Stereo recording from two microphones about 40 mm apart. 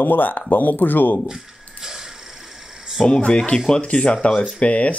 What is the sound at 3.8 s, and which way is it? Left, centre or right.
Speech, left.